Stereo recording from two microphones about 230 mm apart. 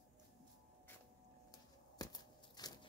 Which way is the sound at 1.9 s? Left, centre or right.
Centre.